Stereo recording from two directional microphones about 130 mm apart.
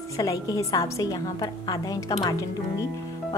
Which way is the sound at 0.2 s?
25° left (ahead or behind).